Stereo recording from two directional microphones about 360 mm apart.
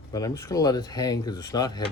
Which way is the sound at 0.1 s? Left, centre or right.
Centre.